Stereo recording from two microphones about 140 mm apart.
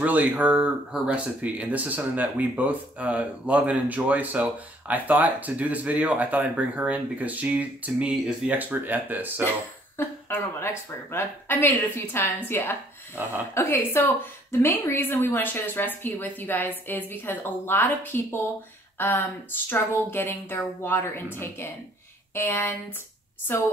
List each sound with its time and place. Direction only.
0.0 s speech: 10° right (ahead or behind)
9.9 s a woman's voice: 15° left (ahead or behind)
22.3 s a woman's voice: 15° left (ahead or behind)